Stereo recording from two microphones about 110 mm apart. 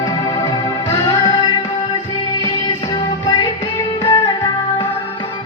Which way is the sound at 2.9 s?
40° left (ahead or behind).